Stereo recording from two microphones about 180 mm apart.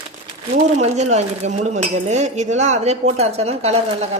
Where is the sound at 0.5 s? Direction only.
40° right (ahead or behind).